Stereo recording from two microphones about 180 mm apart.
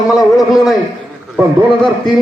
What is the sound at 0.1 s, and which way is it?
Speech, centre (ahead or behind).